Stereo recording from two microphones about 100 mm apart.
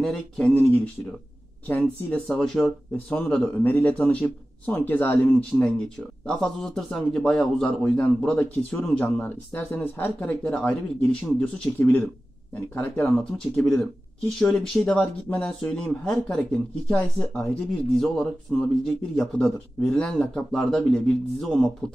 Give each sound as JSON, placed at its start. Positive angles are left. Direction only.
{"t": 0.0, "sound": "speech", "side_deg": 5}
{"t": 0.6, "sound": "speech", "side_deg": 15}
{"t": 2.0, "sound": "speech", "side_deg": 15}
{"t": 6.4, "sound": "speech", "side_deg": 0}